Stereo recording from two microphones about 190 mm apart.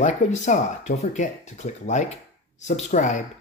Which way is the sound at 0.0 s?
40° left (ahead or behind).